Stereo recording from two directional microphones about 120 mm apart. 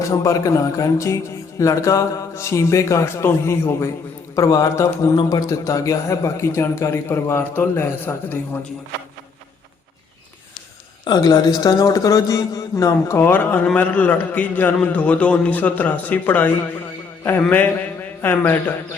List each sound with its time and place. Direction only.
0.0 s a man's voice: 25° left (ahead or behind)
11.0 s a man's voice: 35° left (ahead or behind); by 16.5 s 15° left (ahead or behind)
18.2 s a man's voice: 20° left (ahead or behind)